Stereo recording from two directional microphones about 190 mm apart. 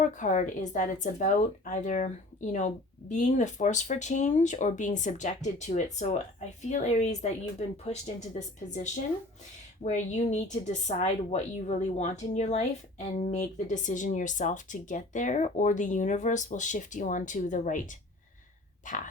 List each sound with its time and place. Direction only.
0.0 s a woman's voice: 40° left (ahead or behind)